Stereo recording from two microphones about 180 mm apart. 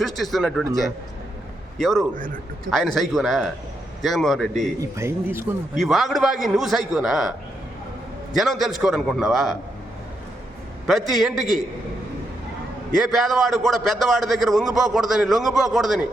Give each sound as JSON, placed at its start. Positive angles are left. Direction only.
{"t": 0.0, "sound": "a man's voice", "side_deg": 0}
{"t": 1.8, "sound": "a man's voice", "side_deg": 0}
{"t": 2.1, "sound": "a man's voice", "side_deg": -50}
{"t": 2.6, "sound": "a man's voice", "side_deg": 0}
{"t": 4.8, "sound": "speech", "side_deg": -15}
{"t": 5.7, "sound": "a man's voice", "side_deg": 0}
{"t": 10.8, "sound": "a man's voice", "side_deg": 0}
{"t": 13.0, "sound": "a man's voice", "side_deg": 0}